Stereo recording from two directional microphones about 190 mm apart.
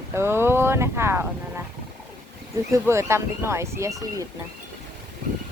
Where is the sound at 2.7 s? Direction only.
15° right (ahead or behind).